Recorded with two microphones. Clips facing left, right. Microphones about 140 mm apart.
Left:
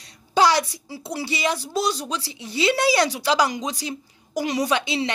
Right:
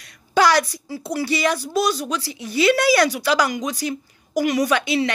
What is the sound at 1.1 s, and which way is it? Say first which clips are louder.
Speech: right 4 dB; 20° left (ahead or behind).